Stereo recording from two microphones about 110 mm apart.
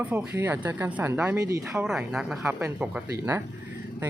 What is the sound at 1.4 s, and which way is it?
Speech, 30° right (ahead or behind).